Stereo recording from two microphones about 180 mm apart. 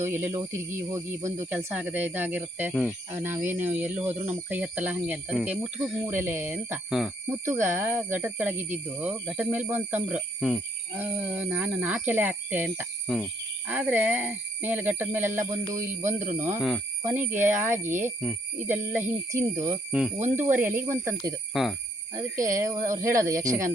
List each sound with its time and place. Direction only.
0.0 s speech: 10° right (ahead or behind)
1.4 s speech: 10° right (ahead or behind)
13.1 s a sound: centre (ahead or behind)
13.7 s speech: 10° right (ahead or behind)
16.6 s speech: centre (ahead or behind)
17.0 s speech: 15° right (ahead or behind)
19.9 s speech: 5° right (ahead or behind)
21.5 s speech: centre (ahead or behind)
22.1 s speech: 20° right (ahead or behind)